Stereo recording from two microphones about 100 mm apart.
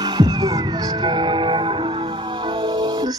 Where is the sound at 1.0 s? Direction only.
55° right (ahead or behind).